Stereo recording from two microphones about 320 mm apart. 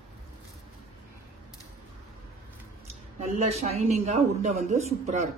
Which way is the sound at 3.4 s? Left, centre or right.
Centre.